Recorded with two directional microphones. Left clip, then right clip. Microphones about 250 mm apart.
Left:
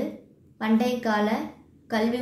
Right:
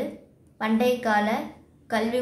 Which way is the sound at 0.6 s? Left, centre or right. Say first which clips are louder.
Right 2 dB; centre.